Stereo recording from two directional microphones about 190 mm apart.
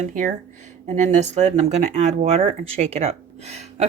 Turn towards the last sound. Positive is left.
turn(degrees=-35)  # may be behind; listen again after turning